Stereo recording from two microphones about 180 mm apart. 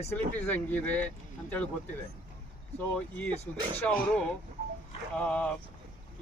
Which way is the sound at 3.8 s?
5° left (ahead or behind).